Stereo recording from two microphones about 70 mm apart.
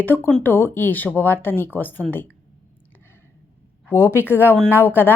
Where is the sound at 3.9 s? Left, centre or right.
Left.